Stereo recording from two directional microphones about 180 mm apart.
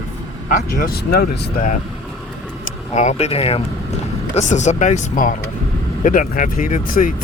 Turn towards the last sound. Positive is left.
turn(degrees=50)  # may be behind; listen again after turning